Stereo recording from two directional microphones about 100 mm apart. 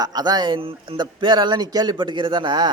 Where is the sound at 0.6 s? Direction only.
60° right (ahead or behind).